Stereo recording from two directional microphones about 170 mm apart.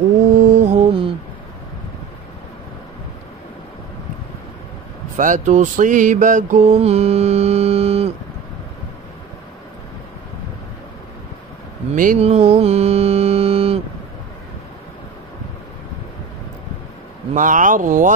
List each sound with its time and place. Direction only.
0.6 s mantra: 40° right (ahead or behind)
5.1 s mantra: 50° right (ahead or behind)
11.9 s speech: 55° right (ahead or behind)
12.2 s mantra: 40° right (ahead or behind)
17.3 s speech: 50° right (ahead or behind)